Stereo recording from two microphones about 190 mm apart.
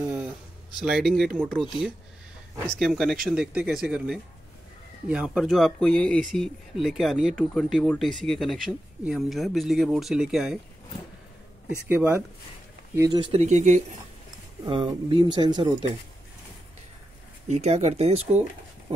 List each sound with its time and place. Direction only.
0.0 s a sound: 5° right (ahead or behind)
0.7 s speech: centre (ahead or behind)
2.6 s speech: centre (ahead or behind)
11.9 s speech: 10° right (ahead or behind)
13.2 s speech: 35° right (ahead or behind)
14.6 s speech: 25° right (ahead or behind)
17.5 s speech: 35° right (ahead or behind)
18.9 s dog: 30° right (ahead or behind)